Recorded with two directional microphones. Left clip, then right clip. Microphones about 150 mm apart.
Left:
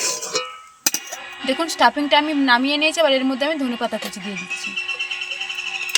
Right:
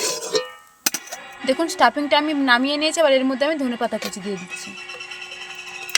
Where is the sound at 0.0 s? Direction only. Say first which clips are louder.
Right 1 dB; 70° right (ahead or behind).